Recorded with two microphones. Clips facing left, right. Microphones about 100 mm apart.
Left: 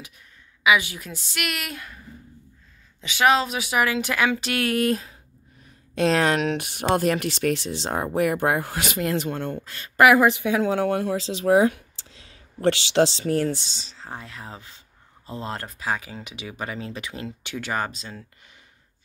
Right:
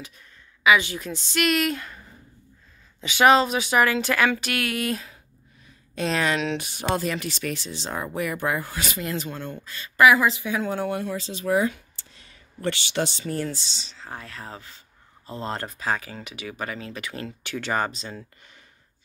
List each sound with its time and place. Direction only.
0.7 s a woman's voice: 10° left (ahead or behind); by 5.1 s 40° left (ahead or behind)
5.9 s speech: 75° left (ahead or behind)
6.4 s speech: 60° left (ahead or behind); by 11.7 s 85° left
12.0 s a sound: 90° left
13.3 s speech: 70° left (ahead or behind); by 13.9 s 45° left (ahead or behind)
13.9 s a woman's voice: 25° left (ahead or behind)
15.5 s a woman's voice: 5° left (ahead or behind)
17.6 s speech: 5° left (ahead or behind)